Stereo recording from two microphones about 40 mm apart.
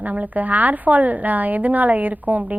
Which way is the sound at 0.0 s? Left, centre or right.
Right.